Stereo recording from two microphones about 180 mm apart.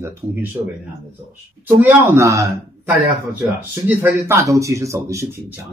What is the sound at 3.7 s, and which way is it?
Speech, 15° right (ahead or behind).